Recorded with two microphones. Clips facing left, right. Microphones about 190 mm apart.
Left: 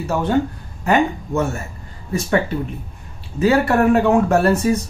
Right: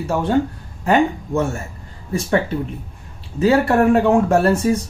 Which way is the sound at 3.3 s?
30° right (ahead or behind).